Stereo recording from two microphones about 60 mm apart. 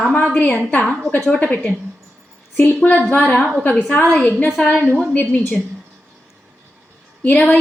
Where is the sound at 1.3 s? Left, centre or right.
Left.